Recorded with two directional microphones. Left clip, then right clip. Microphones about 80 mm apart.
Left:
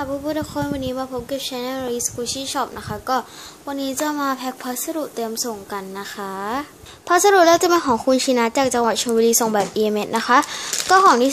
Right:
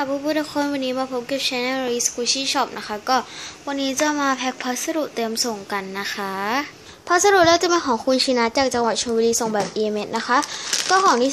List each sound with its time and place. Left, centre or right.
0.0 s a woman's voice: centre
7.1 s a woman's voice: left